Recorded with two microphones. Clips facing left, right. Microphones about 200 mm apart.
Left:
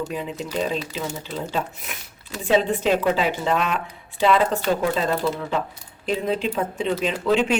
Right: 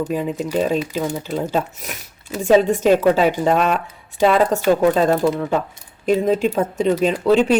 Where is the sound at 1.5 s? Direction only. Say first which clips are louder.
Right 5 dB; 40° right (ahead or behind).